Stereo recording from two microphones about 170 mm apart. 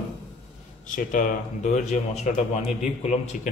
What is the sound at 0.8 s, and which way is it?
Speech, 50° left (ahead or behind).